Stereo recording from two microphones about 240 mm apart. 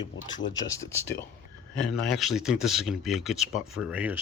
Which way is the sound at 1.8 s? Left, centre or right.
Centre.